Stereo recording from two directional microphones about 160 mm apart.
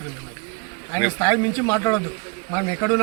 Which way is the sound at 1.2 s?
20° left (ahead or behind).